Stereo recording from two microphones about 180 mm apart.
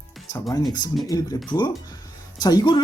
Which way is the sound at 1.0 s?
20° left (ahead or behind).